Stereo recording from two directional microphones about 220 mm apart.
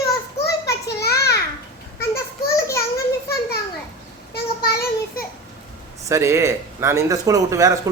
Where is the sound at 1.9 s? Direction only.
15° left (ahead or behind).